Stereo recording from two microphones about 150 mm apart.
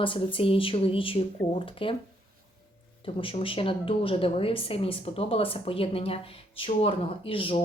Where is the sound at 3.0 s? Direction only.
35° left (ahead or behind).